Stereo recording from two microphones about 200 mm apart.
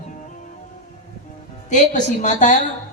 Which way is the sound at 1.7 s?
40° left (ahead or behind).